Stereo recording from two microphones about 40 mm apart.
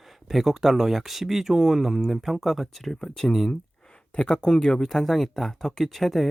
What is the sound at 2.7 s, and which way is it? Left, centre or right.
Speech, centre.